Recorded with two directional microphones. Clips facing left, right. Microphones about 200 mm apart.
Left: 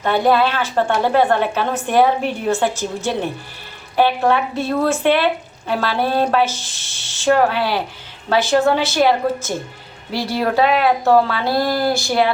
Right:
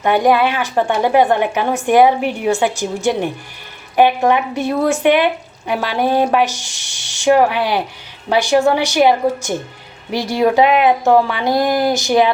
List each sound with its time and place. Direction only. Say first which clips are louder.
0.0 s speech: right 2 dB; 15° right (ahead or behind)